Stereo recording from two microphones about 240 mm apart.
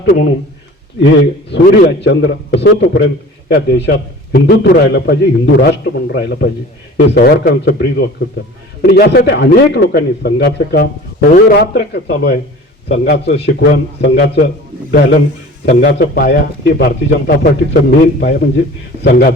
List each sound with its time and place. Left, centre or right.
0.0 s a man's voice: left